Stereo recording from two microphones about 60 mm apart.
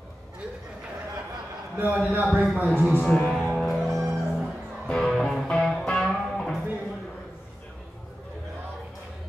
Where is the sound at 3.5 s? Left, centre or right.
Centre.